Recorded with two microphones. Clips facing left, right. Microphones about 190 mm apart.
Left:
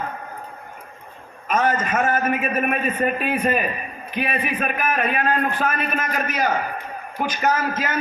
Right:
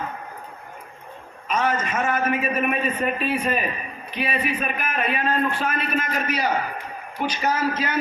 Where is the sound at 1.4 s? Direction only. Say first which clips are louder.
Left 3 dB; 50° left (ahead or behind).